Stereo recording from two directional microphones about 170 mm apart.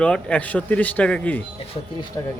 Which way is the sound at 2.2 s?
20° left (ahead or behind).